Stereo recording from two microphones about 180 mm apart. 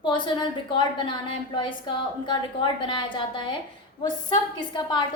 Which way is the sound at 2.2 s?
25° left (ahead or behind).